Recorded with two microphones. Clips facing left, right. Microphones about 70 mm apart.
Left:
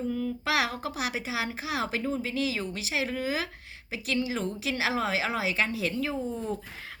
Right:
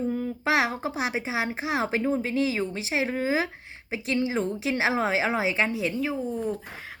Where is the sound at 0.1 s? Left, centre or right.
Right.